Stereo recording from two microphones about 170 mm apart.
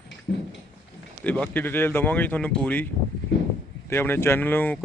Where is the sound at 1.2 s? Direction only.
10° left (ahead or behind).